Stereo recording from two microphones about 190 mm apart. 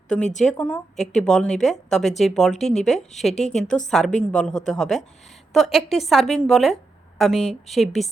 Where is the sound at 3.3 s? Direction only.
35° left (ahead or behind).